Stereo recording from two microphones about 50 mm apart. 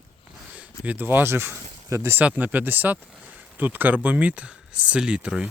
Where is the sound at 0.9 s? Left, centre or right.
Right.